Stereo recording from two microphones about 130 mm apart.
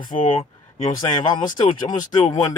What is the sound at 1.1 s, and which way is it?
Speech, 35° left (ahead or behind).